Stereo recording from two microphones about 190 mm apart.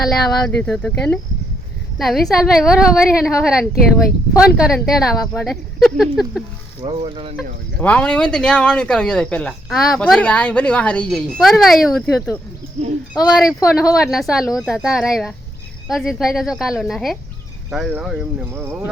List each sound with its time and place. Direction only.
0.4 s speech: 5° left (ahead or behind)
6.8 s speech: 25° right (ahead or behind)
7.8 s speech: 5° left (ahead or behind); by 18.9 s 10° right (ahead or behind)